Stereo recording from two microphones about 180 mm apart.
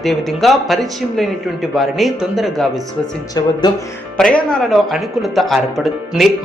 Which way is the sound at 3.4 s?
20° left (ahead or behind).